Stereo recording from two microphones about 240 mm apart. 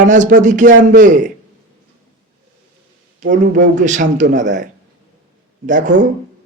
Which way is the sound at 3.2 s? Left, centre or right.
Right.